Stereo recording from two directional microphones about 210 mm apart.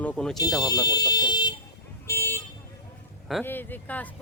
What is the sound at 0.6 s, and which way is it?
Alarm, 15° left (ahead or behind).